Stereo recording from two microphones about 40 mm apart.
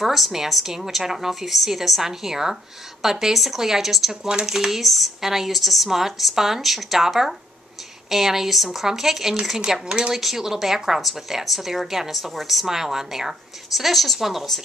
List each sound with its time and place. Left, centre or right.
0.0 s a woman's voice: centre
9.7 s a woman's voice: centre
10.1 s speech: centre